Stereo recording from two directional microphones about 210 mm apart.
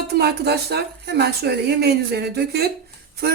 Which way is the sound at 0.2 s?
50° right (ahead or behind).